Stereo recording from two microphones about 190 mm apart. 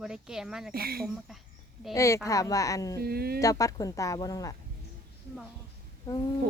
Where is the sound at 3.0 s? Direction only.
55° right (ahead or behind).